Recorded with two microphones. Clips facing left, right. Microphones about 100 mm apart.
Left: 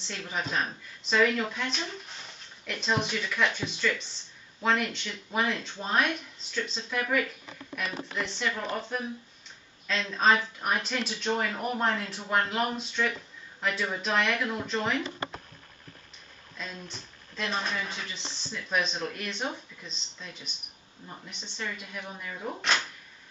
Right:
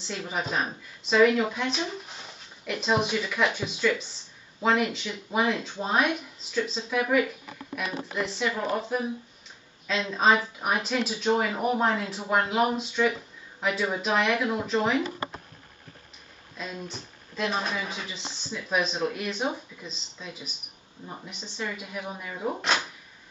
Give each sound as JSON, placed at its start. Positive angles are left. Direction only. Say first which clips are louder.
{"t": 0.0, "sound": "a woman's voice", "louder": "right 3 dB", "side_deg": -5}
{"t": 16.5, "sound": "a woman's voice", "louder": "right 4 dB", "side_deg": -5}
{"t": 22.6, "sound": "a woman's voice", "louder": "even", "side_deg": 0}